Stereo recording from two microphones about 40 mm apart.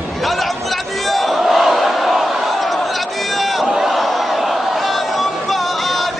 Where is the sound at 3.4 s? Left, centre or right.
Centre.